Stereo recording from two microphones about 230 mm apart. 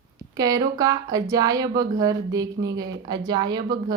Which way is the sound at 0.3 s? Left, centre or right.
Centre.